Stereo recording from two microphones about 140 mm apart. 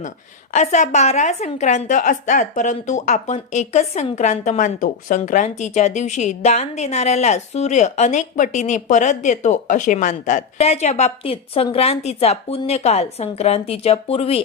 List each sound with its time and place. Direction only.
0.5 s a woman's voice: 55° left (ahead or behind)